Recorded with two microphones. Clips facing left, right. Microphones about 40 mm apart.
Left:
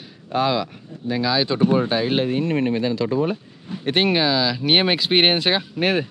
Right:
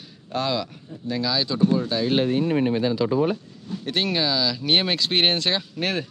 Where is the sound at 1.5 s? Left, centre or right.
Left.